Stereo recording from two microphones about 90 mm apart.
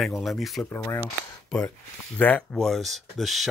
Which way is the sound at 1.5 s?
5° left (ahead or behind).